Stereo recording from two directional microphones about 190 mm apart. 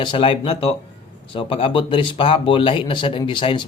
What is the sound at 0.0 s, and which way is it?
Speech, 25° left (ahead or behind).